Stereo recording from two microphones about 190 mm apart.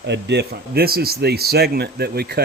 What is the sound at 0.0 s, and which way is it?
Speech, 65° right (ahead or behind).